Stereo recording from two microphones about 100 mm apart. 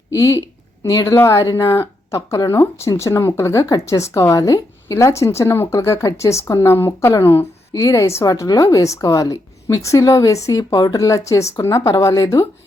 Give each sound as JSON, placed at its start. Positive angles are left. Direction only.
{"t": 0.1, "sound": "speech", "side_deg": 35}
{"t": 7.7, "sound": "speech", "side_deg": 35}